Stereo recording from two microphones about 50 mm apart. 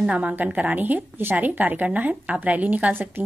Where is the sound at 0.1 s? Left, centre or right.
Right.